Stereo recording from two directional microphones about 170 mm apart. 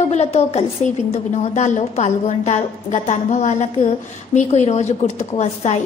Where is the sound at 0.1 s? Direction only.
40° left (ahead or behind).